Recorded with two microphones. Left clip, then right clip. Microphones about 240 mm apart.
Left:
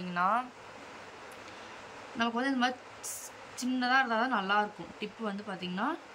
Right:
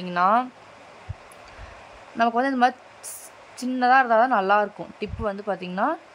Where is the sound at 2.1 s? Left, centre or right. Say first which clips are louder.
Right 10 dB; right.